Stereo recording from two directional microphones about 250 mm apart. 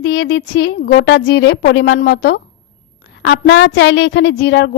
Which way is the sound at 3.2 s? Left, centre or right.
Left.